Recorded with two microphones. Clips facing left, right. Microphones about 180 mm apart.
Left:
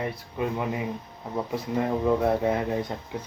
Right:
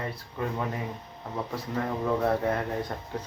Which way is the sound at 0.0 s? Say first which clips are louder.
Left 4 dB; 15° left (ahead or behind).